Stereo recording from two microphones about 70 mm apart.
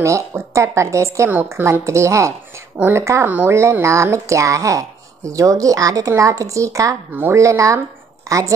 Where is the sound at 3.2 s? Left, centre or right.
Right.